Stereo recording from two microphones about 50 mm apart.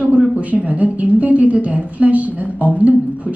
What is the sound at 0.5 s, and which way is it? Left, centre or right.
A woman's voice, right.